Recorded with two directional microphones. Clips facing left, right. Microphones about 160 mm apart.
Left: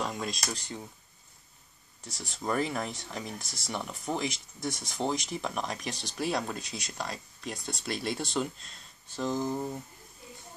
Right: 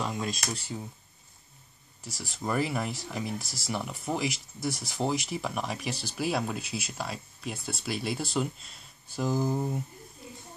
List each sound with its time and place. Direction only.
0.0 s a sound: centre (ahead or behind)
0.5 s speech: 5° right (ahead or behind)
2.0 s speech: 5° right (ahead or behind)